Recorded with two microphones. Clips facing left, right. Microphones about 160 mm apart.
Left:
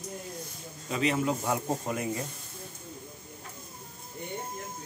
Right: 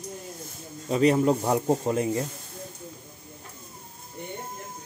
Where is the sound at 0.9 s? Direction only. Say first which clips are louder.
Right 7 dB; 40° right (ahead or behind).